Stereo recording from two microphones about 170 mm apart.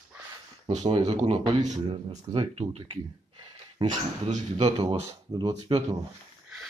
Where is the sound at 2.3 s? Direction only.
30° right (ahead or behind).